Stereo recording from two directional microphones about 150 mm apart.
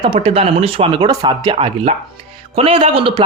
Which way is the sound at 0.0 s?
40° right (ahead or behind).